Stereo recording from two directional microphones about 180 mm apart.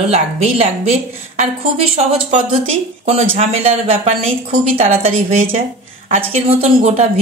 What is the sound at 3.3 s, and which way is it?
Speech, 35° right (ahead or behind).